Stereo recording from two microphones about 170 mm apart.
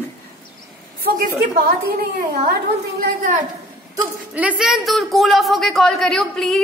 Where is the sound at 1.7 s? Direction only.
60° right (ahead or behind).